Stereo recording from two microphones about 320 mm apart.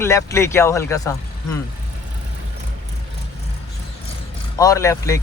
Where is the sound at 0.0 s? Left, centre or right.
Centre.